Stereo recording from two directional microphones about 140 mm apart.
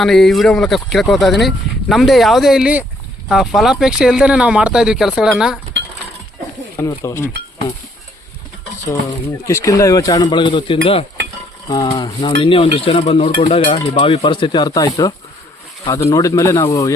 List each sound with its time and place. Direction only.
0.0 s speech: centre (ahead or behind)
6.7 s speech: 20° left (ahead or behind)
9.4 s speech: 20° left (ahead or behind); by 11.0 s 40° left (ahead or behind)
11.7 s cutlery: 30° left (ahead or behind)
15.9 s speech: 25° left (ahead or behind)